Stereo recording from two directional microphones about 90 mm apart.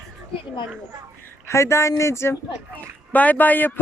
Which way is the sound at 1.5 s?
30° left (ahead or behind).